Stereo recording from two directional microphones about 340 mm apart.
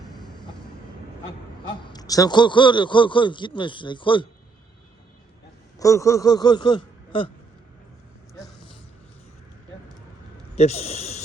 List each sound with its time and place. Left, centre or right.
0.1 s vehicle: centre
1.6 s a man's voice: centre
5.8 s a man's voice: centre
10.5 s a man's voice: centre